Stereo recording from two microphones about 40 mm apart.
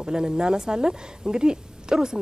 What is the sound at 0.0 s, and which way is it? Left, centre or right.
Speech, centre.